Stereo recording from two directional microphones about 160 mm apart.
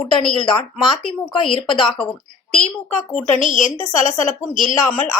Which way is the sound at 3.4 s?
50° left (ahead or behind).